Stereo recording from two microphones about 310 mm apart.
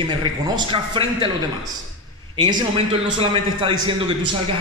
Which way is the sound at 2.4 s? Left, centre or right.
Centre.